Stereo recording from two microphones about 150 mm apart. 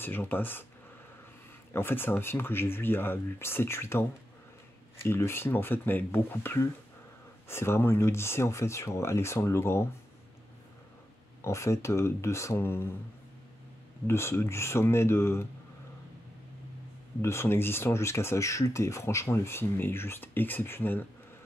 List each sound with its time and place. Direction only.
0.0 s speech: 15° left (ahead or behind)
1.7 s speech: 15° left (ahead or behind)
11.4 s speech: 20° left (ahead or behind)
14.0 s speech: 15° left (ahead or behind)
17.2 s speech: 15° left (ahead or behind)